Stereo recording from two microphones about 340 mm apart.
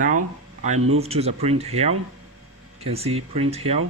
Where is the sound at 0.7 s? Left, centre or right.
Right.